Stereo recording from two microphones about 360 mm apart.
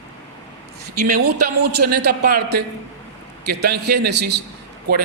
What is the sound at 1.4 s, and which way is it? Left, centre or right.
A woman's voice, right.